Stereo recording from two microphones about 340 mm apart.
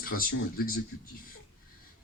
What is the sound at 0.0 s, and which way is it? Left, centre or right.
Speech, left.